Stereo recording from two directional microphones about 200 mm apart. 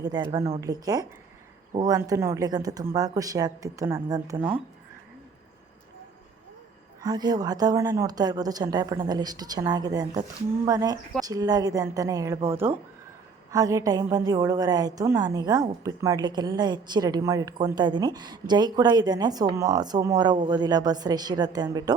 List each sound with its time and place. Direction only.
0.0 s a woman's voice: 20° right (ahead or behind)
7.0 s a woman's voice: 20° right (ahead or behind)